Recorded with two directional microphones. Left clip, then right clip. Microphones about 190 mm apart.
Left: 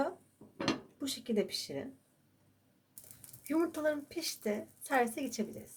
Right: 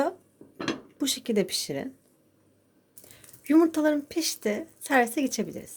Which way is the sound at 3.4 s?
50° right (ahead or behind).